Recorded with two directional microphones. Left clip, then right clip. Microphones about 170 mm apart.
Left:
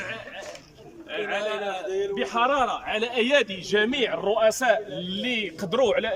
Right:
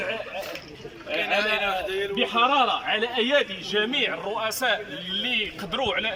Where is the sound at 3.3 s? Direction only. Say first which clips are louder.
Left 1 dB; 30° left (ahead or behind).